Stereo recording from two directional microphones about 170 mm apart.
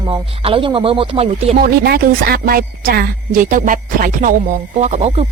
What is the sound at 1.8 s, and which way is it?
Speech, 60° right (ahead or behind).